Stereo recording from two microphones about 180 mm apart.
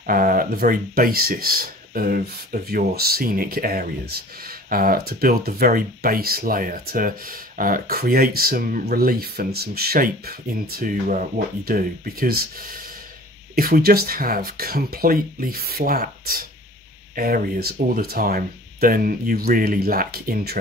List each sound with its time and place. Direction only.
0.0 s speech: 50° right (ahead or behind)